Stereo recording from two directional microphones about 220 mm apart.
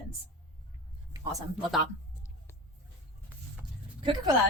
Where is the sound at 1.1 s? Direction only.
15° right (ahead or behind).